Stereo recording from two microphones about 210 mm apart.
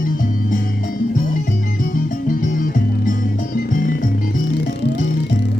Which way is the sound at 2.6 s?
40° left (ahead or behind).